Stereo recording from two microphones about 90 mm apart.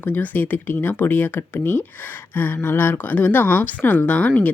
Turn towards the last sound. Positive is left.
turn(degrees=15)  # may be behind; listen again after turning